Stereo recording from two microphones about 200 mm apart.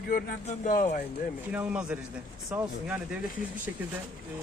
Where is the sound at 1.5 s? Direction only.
5° right (ahead or behind).